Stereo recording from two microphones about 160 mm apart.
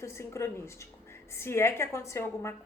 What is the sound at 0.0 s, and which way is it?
A woman's voice, 15° left (ahead or behind).